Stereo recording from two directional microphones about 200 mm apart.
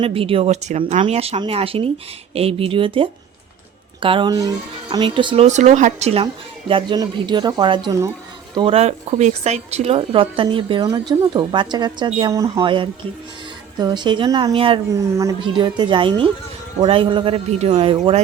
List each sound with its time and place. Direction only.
0.0 s a woman's voice: 30° right (ahead or behind)
5.5 s a woman's voice: 35° right (ahead or behind)